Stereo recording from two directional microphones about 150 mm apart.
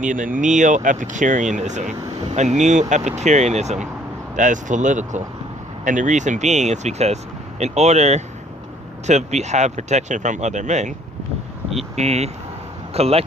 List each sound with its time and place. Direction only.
0.0 s speech: 60° right (ahead or behind)
11.9 s speech: 45° right (ahead or behind)